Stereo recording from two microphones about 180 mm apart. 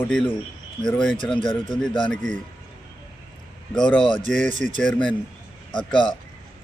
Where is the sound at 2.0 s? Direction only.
5° left (ahead or behind).